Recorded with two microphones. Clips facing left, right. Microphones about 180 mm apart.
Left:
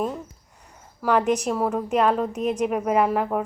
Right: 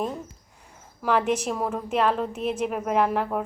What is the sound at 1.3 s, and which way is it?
Speech, 5° right (ahead or behind).